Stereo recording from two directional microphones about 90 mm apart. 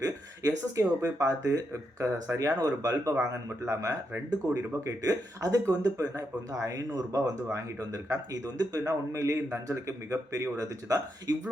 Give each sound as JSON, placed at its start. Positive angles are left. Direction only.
{"t": 0.0, "sound": "speech", "side_deg": -40}